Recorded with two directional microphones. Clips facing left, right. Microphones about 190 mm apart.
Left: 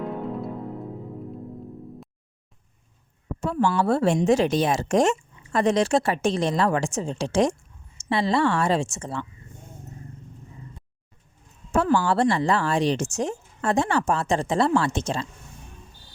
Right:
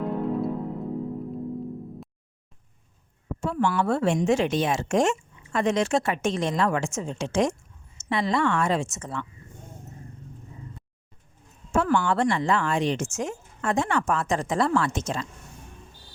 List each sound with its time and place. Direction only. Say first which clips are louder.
0.0 s music: right 3 dB; centre (ahead or behind)
3.5 s speech: left 2 dB; 35° left (ahead or behind)
11.7 s speech: left 2 dB; 35° left (ahead or behind)